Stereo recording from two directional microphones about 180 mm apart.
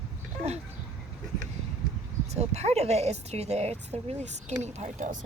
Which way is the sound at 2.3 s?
35° right (ahead or behind).